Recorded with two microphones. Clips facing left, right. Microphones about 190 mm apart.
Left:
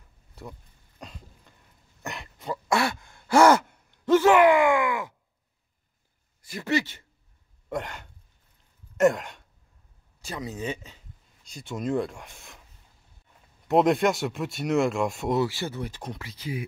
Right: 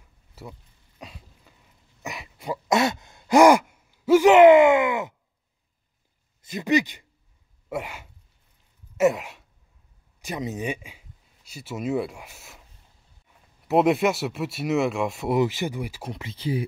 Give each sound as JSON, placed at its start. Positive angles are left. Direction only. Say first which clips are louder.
{"t": 0.4, "sound": "a sound", "louder": "right 1 dB", "side_deg": -5}
{"t": 4.3, "sound": "groan", "louder": "right 7 dB", "side_deg": -25}
{"t": 6.4, "sound": "speech", "louder": "right 4 dB", "side_deg": -20}
{"t": 8.9, "sound": "a sound", "louder": "even", "side_deg": -5}
{"t": 10.2, "sound": "speech", "louder": "right 3 dB", "side_deg": -20}
{"t": 13.7, "sound": "speech", "louder": "right 1 dB", "side_deg": -5}
{"t": 15.3, "sound": "speech", "louder": "right 3 dB", "side_deg": -15}
{"t": 16.2, "sound": "speech", "louder": "right 9 dB", "side_deg": -25}